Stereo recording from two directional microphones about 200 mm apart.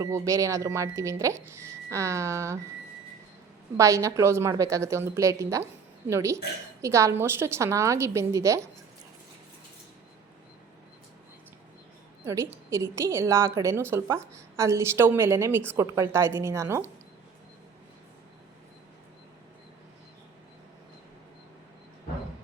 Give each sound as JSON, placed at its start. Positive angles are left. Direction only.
{"t": 0.0, "sound": "speech", "side_deg": -15}
{"t": 3.8, "sound": "speech", "side_deg": -15}
{"t": 12.2, "sound": "a woman's voice", "side_deg": -15}